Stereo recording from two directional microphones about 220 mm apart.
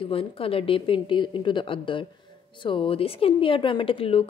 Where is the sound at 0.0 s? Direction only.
25° left (ahead or behind).